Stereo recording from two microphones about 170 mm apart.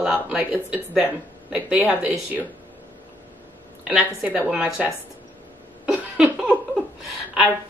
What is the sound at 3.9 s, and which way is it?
A woman's voice, 10° right (ahead or behind).